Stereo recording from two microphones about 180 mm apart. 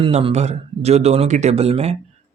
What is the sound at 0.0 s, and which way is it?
Speech, 30° right (ahead or behind).